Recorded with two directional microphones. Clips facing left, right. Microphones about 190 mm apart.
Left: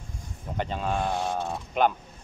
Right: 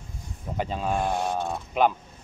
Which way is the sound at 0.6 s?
5° right (ahead or behind).